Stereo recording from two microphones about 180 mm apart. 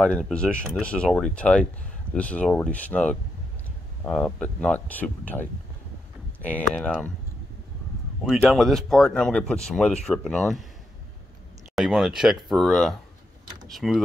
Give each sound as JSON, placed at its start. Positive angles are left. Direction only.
{"t": 0.0, "sound": "speech", "side_deg": 5}
{"t": 8.3, "sound": "speech", "side_deg": 0}
{"t": 11.7, "sound": "speech", "side_deg": 0}